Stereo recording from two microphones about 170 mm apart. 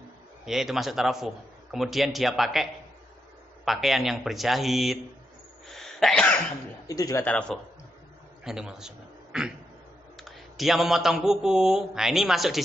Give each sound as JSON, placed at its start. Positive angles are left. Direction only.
{"t": 0.5, "sound": "mantra", "side_deg": 0}
{"t": 5.7, "sound": "cough", "side_deg": 0}
{"t": 6.9, "sound": "a man's voice", "side_deg": 20}
{"t": 7.2, "sound": "a man's voice", "side_deg": 5}
{"t": 10.1, "sound": "mantra", "side_deg": 0}